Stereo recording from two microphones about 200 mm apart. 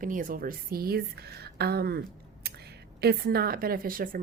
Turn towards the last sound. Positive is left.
turn(degrees=-45)  # may be behind; listen again after turning